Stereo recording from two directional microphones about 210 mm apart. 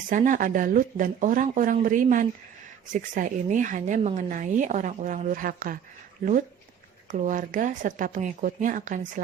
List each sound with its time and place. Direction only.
0.1 s speech: 40° right (ahead or behind)
7.1 s speech: 40° right (ahead or behind)